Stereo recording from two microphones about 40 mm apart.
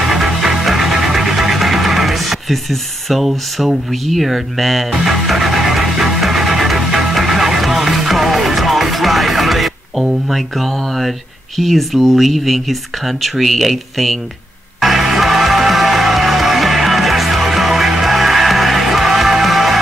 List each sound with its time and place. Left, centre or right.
0.0 s music: centre
10.0 s speech: centre
14.8 s music: centre